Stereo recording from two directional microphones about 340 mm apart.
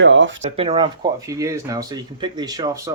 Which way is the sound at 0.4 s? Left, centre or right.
Centre.